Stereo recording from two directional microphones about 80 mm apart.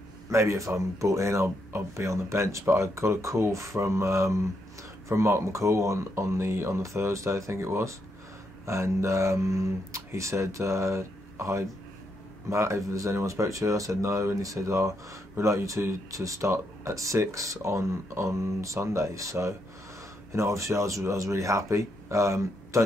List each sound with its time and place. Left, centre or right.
0.3 s speech: right